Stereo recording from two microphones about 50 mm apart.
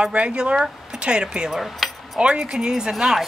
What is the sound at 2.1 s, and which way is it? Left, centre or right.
Speech, centre.